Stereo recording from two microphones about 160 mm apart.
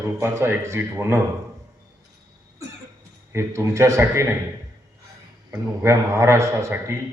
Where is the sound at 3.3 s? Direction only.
15° right (ahead or behind).